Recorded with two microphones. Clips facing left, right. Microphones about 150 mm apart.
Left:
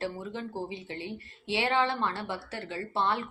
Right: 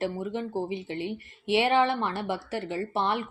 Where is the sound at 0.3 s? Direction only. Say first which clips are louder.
Right 5 dB; 20° right (ahead or behind).